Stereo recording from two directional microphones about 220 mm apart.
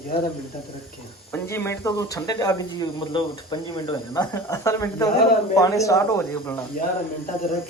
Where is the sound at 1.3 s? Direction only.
10° left (ahead or behind).